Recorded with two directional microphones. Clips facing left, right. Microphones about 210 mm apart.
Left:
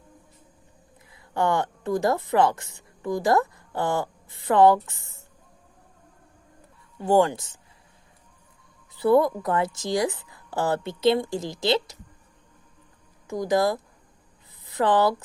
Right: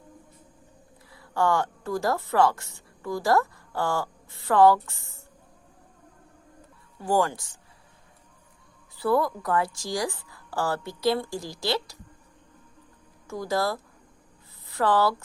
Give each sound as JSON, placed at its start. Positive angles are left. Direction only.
{"t": 1.1, "sound": "speech", "side_deg": 20}
{"t": 7.0, "sound": "a woman's voice", "side_deg": 20}
{"t": 9.0, "sound": "a woman's voice", "side_deg": 20}
{"t": 13.2, "sound": "speech", "side_deg": 15}